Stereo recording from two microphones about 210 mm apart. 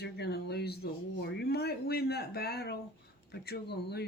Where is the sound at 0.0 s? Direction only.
50° left (ahead or behind).